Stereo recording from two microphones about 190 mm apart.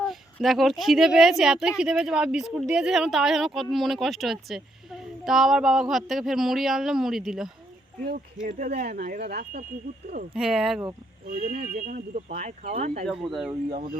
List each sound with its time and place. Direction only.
0.0 s speech: centre (ahead or behind)
7.9 s speech: 50° right (ahead or behind)
10.3 s speech: 5° right (ahead or behind)
11.3 s speech: 50° right (ahead or behind)